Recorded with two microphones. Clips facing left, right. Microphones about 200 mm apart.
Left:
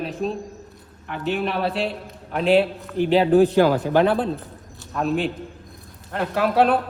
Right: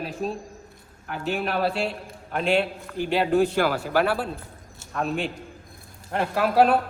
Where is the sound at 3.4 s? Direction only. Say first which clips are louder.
Left 6 dB; 20° left (ahead or behind).